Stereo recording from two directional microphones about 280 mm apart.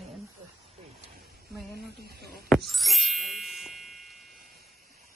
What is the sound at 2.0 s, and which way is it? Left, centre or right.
Speech, right.